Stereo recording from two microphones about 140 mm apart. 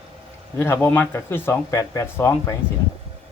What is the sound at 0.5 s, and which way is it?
Speech, 20° left (ahead or behind).